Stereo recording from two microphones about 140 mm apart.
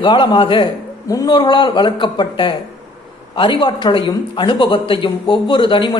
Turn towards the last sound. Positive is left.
turn(degrees=35)  # may be behind; listen again after turning